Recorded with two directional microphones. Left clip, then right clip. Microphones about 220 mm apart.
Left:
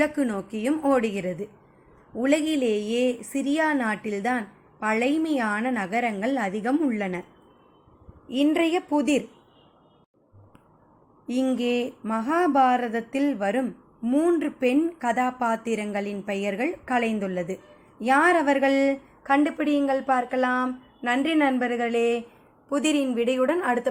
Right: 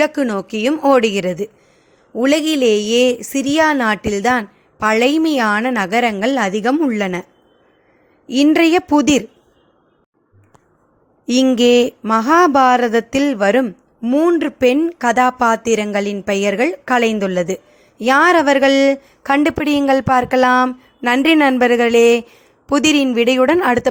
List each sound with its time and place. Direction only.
0.0 s speech: 40° right (ahead or behind)
8.3 s speech: 45° right (ahead or behind)
11.3 s speech: 40° right (ahead or behind)